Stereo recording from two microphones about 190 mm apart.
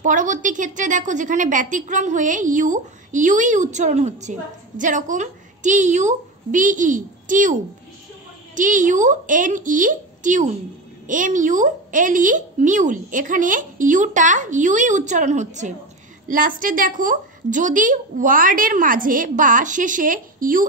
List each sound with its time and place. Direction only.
0.0 s a woman's voice: 45° right (ahead or behind)
8.5 s a woman's voice: 45° right (ahead or behind)